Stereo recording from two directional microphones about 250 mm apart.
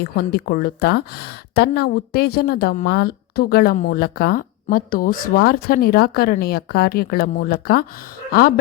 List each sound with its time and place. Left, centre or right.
0.0 s speech: left